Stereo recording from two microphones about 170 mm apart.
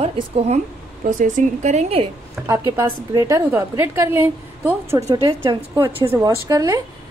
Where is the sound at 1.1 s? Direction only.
45° right (ahead or behind).